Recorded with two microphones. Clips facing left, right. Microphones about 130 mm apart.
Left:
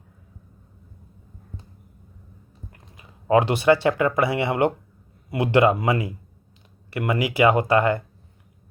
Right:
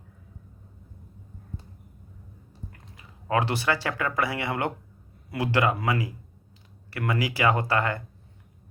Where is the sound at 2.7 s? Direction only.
20° left (ahead or behind).